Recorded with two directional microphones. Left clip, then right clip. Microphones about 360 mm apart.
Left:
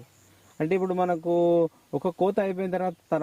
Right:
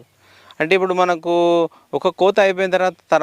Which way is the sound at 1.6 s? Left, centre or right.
Centre.